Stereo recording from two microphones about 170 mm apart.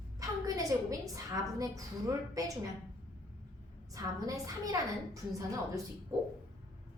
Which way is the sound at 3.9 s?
20° right (ahead or behind).